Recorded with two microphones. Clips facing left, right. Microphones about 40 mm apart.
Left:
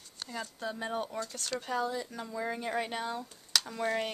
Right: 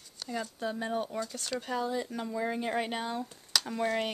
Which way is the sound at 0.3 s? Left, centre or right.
Centre.